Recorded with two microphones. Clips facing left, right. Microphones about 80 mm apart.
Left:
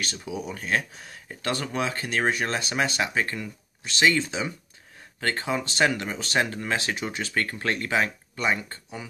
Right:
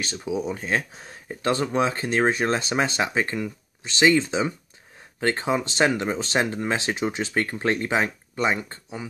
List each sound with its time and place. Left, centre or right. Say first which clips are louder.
0.0 s speech: right 5 dB; right